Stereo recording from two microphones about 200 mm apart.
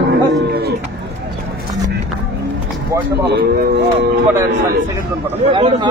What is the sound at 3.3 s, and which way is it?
Speech, 55° right (ahead or behind).